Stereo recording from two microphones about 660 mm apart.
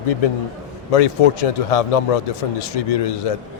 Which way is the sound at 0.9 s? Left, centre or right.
Left.